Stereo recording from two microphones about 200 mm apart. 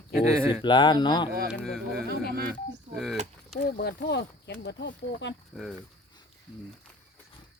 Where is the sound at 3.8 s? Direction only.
55° left (ahead or behind).